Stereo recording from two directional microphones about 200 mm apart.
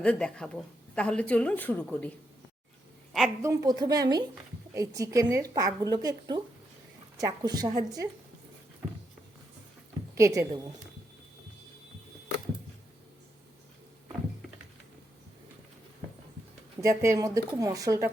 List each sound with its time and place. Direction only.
0.0 s speech: 5° left (ahead or behind)
3.4 s a woman's voice: 20° right (ahead or behind)
10.2 s a woman's voice: 15° right (ahead or behind)
16.8 s a woman's voice: 15° right (ahead or behind)